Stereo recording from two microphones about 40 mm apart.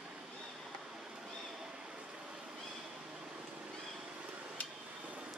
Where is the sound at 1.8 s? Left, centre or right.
Right.